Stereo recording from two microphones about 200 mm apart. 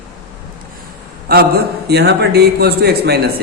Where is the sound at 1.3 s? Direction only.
50° right (ahead or behind).